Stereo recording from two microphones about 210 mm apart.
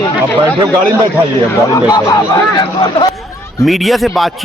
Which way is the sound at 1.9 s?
15° left (ahead or behind).